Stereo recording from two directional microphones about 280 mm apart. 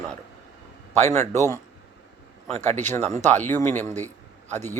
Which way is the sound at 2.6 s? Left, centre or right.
Right.